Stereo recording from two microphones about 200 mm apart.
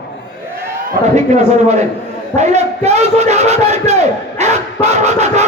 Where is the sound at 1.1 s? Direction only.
35° right (ahead or behind).